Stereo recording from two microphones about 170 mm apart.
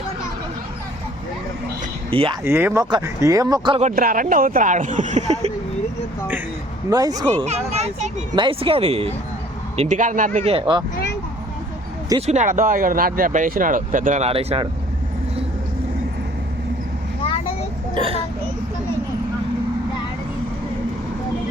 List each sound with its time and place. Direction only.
2.0 s speech: 30° right (ahead or behind)
2.4 s speech: 10° right (ahead or behind)
3.8 s speech: 50° right (ahead or behind)
6.9 s speech: 20° right (ahead or behind)
7.3 s speech: 40° right (ahead or behind)
8.4 s speech: 30° right (ahead or behind); by 10.5 s 50° right (ahead or behind)
10.5 s speech: 25° right (ahead or behind)
12.2 s speech: 45° right (ahead or behind)
17.9 s speech: 30° right (ahead or behind)